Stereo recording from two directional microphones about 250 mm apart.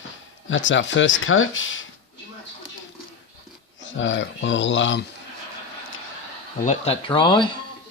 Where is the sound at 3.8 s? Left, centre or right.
Left.